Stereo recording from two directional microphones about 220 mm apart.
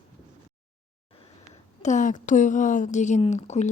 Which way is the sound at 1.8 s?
35° left (ahead or behind).